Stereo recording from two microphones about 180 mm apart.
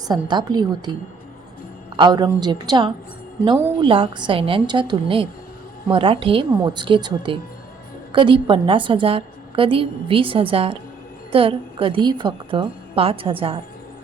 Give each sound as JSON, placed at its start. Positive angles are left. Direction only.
{"t": 0.1, "sound": "a woman's voice", "side_deg": -25}
{"t": 2.0, "sound": "a woman's voice", "side_deg": -20}